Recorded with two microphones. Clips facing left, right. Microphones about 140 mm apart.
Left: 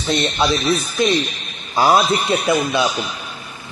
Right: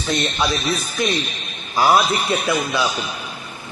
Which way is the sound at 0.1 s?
25° left (ahead or behind).